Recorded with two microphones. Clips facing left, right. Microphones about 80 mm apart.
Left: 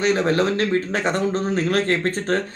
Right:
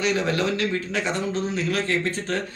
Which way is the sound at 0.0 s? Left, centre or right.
Left.